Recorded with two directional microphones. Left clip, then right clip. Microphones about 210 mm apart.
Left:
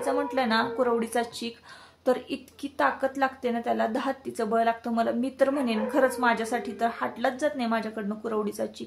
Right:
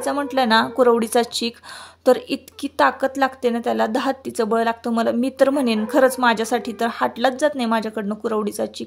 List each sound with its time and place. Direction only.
0.0 s a woman's voice: 40° right (ahead or behind)